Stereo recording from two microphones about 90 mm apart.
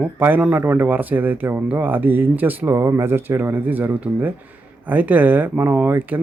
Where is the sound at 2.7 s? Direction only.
35° right (ahead or behind).